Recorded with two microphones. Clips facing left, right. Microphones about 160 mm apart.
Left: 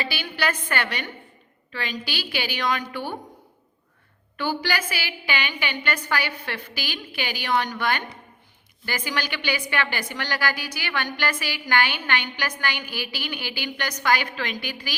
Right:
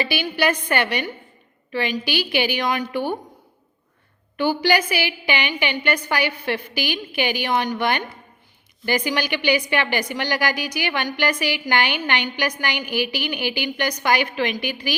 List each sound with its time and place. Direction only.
0.0 s a woman's voice: 15° right (ahead or behind)
4.4 s a woman's voice: 15° right (ahead or behind)
9.0 s a woman's voice: 15° right (ahead or behind)